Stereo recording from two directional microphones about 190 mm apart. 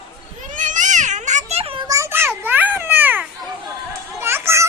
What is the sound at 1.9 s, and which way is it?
Children playing, 15° right (ahead or behind).